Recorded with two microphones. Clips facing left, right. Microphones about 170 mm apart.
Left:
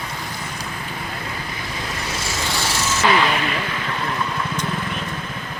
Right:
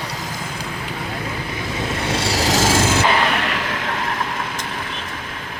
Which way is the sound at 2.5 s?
90° right.